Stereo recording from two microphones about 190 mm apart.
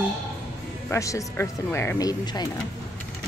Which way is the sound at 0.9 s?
15° left (ahead or behind).